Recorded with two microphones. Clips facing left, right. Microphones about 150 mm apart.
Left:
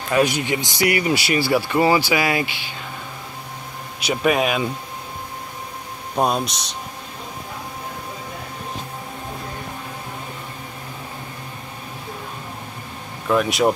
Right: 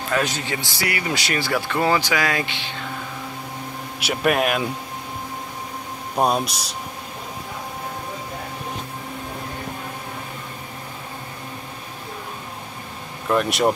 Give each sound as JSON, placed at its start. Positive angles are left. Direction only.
{"t": 0.1, "sound": "speech", "side_deg": 15}
{"t": 1.1, "sound": "speech", "side_deg": 5}
{"t": 4.0, "sound": "speech", "side_deg": 0}
{"t": 6.1, "sound": "speech", "side_deg": -5}
{"t": 13.3, "sound": "speech", "side_deg": 0}